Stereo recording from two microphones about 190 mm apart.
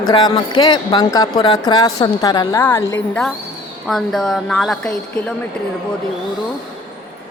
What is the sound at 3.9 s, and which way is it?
A woman's voice, centre (ahead or behind).